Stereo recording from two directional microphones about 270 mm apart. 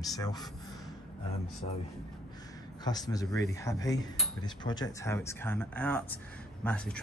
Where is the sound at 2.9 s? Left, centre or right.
Centre.